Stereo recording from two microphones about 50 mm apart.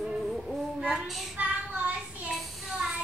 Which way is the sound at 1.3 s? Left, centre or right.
Right.